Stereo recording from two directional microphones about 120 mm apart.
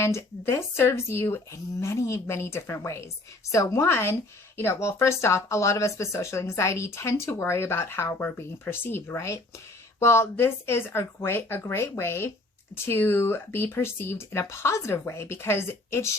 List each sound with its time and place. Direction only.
0.0 s a woman's voice: 20° left (ahead or behind)